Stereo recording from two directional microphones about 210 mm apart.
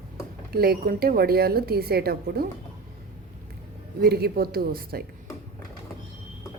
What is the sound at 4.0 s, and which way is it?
Speech, 45° right (ahead or behind).